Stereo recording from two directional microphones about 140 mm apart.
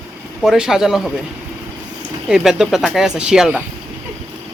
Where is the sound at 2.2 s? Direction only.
5° right (ahead or behind).